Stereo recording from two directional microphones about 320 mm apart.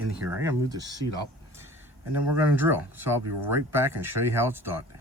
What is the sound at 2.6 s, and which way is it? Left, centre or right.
Speech, centre.